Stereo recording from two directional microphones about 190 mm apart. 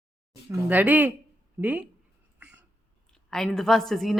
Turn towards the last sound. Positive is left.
turn(degrees=0)  # may be behind; listen again after turning